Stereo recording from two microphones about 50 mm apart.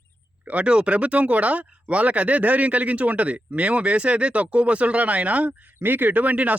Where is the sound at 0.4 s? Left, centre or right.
Right.